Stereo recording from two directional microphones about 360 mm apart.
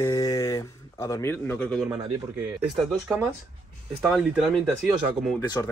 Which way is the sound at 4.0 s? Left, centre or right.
Centre.